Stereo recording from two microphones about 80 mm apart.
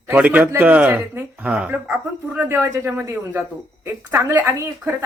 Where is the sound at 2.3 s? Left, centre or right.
Right.